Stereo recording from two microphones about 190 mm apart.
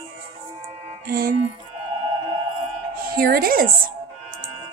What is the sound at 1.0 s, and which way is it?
Speech, 55° right (ahead or behind).